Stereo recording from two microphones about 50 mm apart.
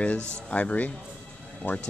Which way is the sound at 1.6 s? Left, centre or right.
Left.